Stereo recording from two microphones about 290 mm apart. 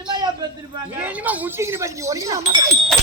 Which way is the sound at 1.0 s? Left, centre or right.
Centre.